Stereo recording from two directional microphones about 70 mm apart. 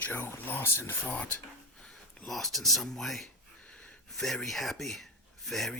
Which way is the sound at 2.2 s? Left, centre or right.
Centre.